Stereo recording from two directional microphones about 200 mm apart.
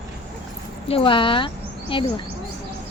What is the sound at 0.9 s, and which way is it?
Speech, 25° left (ahead or behind).